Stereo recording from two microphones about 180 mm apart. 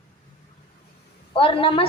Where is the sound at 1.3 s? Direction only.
30° left (ahead or behind).